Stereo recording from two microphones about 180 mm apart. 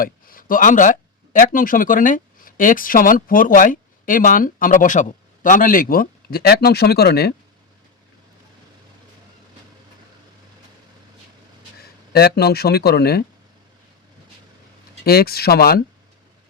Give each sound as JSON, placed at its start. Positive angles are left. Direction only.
{"t": 0.0, "sound": "speech", "side_deg": 50}
{"t": 12.1, "sound": "speech", "side_deg": 60}
{"t": 15.0, "sound": "speech", "side_deg": 60}